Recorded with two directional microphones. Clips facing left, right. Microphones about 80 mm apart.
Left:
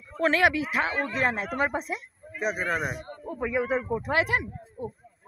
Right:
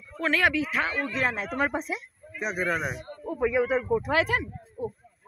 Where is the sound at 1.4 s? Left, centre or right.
Centre.